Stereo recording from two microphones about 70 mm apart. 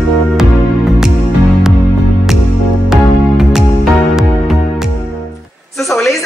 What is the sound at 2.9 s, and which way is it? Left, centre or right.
Music, centre.